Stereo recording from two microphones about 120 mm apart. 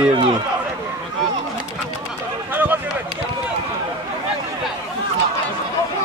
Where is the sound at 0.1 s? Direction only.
45° right (ahead or behind).